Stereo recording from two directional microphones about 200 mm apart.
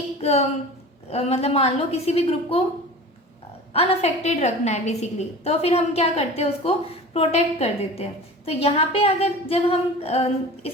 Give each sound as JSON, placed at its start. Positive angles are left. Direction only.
{"t": 0.2, "sound": "a woman's voice", "side_deg": 30}
{"t": 3.7, "sound": "a woman's voice", "side_deg": 30}